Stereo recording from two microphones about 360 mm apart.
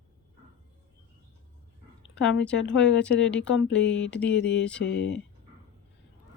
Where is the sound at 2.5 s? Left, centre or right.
Left.